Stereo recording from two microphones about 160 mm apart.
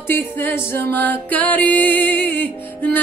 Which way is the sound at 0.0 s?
15° left (ahead or behind).